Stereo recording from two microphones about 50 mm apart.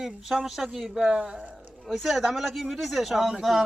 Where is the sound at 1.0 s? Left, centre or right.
Centre.